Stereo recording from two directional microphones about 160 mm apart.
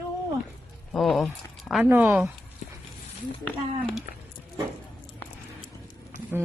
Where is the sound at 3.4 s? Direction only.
10° left (ahead or behind).